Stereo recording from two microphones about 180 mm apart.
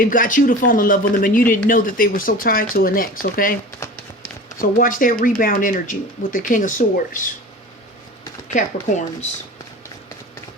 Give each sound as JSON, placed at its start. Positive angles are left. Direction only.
{"t": 0.0, "sound": "speech", "side_deg": 50}
{"t": 4.8, "sound": "speech", "side_deg": 50}
{"t": 8.4, "sound": "speech", "side_deg": 40}